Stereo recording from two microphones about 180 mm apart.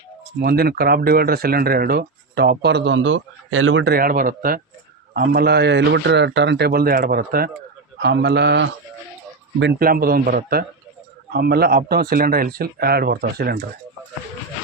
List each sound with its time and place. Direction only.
0.4 s speech: 60° right (ahead or behind); by 3.9 s 90° right
3.9 s speech: 50° right (ahead or behind)
7.9 s speech: 70° right (ahead or behind)
9.7 s speech: 55° right (ahead or behind)